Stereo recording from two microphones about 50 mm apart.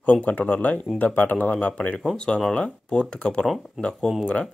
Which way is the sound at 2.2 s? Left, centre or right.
Centre.